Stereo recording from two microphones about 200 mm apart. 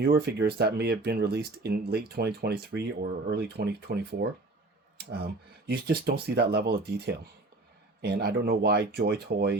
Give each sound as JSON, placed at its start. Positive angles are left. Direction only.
{"t": 0.0, "sound": "speech", "side_deg": -50}